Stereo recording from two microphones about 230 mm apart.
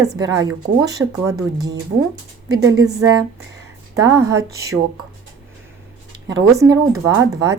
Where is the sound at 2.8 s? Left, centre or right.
Centre.